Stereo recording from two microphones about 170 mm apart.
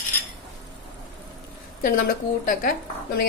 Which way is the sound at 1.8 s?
55° left (ahead or behind).